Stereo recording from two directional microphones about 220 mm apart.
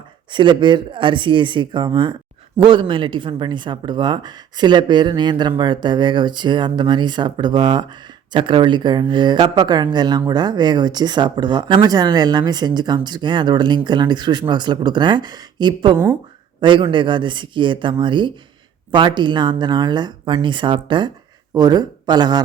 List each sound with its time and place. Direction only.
0.3 s speech: 20° right (ahead or behind)